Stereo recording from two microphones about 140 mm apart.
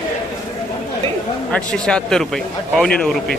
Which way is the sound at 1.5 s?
5° left (ahead or behind).